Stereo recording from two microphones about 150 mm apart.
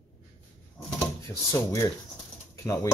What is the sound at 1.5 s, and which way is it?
Speech, 20° left (ahead or behind).